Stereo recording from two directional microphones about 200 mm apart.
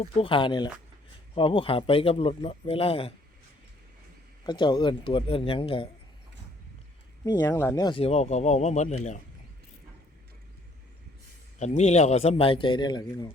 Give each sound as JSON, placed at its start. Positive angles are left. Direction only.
{"t": 0.0, "sound": "a man's voice", "side_deg": 25}
{"t": 4.4, "sound": "a man's voice", "side_deg": 25}
{"t": 7.3, "sound": "speech", "side_deg": 10}
{"t": 11.6, "sound": "a man's voice", "side_deg": 35}